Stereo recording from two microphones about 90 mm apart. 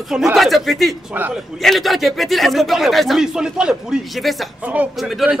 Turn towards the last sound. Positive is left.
turn(degrees=-5)  # may be behind; listen again after turning